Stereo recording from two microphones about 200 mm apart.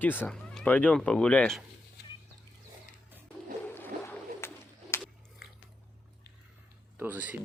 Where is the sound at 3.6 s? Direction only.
10° left (ahead or behind).